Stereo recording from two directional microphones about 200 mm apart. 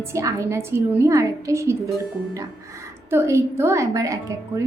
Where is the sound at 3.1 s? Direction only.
15° right (ahead or behind).